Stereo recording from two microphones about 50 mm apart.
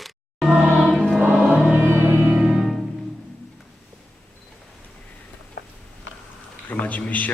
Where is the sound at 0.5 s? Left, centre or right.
Right.